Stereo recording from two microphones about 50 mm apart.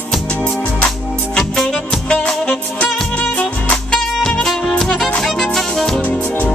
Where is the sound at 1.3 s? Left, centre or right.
Centre.